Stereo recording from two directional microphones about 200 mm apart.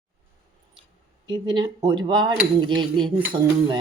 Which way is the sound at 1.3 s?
20° right (ahead or behind).